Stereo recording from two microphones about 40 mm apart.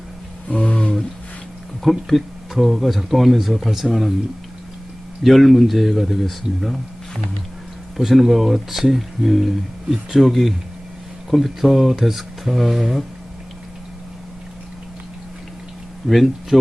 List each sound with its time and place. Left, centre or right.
0.4 s roaring cats: left
1.8 s speech: centre
5.2 s speech: centre
7.9 s speech: centre
16.0 s speech: centre